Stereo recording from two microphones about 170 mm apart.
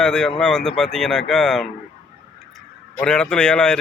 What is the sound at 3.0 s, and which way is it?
Speech, 5° left (ahead or behind).